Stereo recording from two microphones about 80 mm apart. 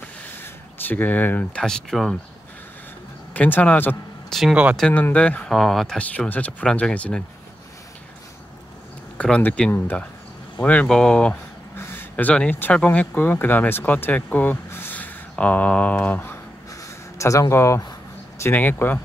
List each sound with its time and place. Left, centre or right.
0.4 s a sound: left
1.6 s speech: centre
3.3 s a man's voice: left
4.3 s speech: centre
4.9 s speech: centre
5.5 s speech: centre
5.9 s speech: centre
9.2 s a man's voice: centre
11.7 s a sound: left
12.7 s speech: centre
17.2 s speech: left
18.5 s a man's voice: left